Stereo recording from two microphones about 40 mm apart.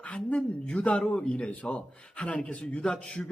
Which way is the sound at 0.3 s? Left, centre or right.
Left.